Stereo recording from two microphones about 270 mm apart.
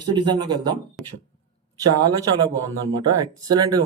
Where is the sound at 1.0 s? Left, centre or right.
Centre.